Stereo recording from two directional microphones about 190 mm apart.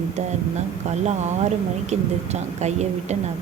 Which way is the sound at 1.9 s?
35° right (ahead or behind).